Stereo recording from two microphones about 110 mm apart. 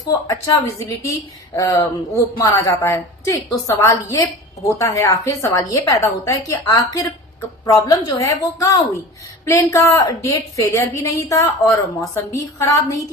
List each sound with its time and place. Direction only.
0.3 s a woman's voice: 30° left (ahead or behind)